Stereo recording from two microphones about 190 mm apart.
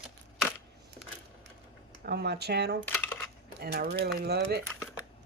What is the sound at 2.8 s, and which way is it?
Coin, 10° left (ahead or behind).